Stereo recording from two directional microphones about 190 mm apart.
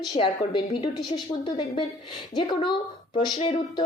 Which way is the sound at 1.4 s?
20° left (ahead or behind).